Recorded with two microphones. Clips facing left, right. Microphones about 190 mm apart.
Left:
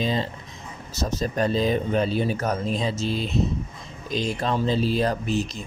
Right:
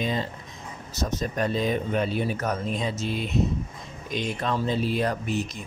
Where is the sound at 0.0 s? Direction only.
30° left (ahead or behind).